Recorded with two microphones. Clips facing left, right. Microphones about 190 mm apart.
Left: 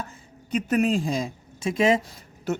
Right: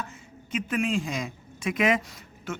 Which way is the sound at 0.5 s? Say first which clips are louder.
Left 5 dB; 40° left (ahead or behind).